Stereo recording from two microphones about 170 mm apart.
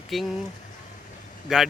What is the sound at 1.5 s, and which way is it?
Speech, centre (ahead or behind).